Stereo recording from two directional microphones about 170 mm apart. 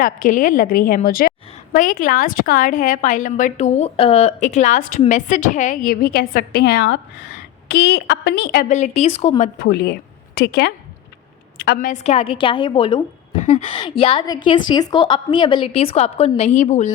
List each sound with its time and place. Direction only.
0.0 s a woman's voice: 50° left (ahead or behind); by 8.6 s 70° left (ahead or behind)
8.7 s a woman's voice: 40° left (ahead or behind)
9.6 s a woman's voice: 70° left (ahead or behind)
12.0 s a woman's voice: 35° left (ahead or behind)